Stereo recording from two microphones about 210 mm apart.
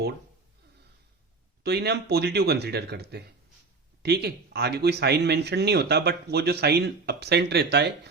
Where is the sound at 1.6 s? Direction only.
50° right (ahead or behind).